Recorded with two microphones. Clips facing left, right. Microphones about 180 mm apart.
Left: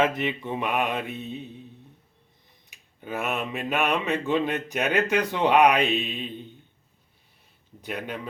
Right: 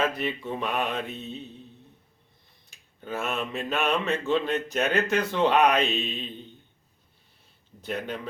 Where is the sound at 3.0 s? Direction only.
10° left (ahead or behind).